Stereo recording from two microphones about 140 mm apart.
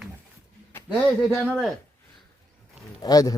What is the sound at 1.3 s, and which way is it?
Speech, centre (ahead or behind).